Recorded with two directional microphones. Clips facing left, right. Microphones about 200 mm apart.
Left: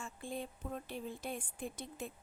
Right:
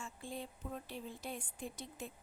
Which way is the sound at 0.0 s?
55° left (ahead or behind).